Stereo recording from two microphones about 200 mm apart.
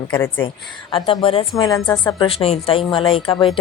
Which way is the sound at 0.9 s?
25° left (ahead or behind).